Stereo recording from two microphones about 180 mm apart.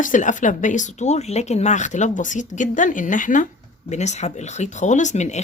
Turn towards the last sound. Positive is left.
turn(degrees=40)  # may be behind; listen again after turning